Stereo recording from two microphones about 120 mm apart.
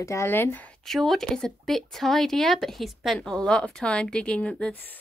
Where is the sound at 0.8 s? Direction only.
Centre (ahead or behind).